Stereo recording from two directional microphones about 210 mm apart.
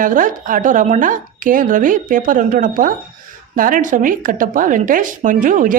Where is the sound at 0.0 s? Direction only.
40° right (ahead or behind).